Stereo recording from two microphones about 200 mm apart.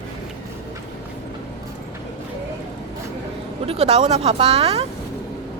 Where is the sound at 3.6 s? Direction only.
30° right (ahead or behind).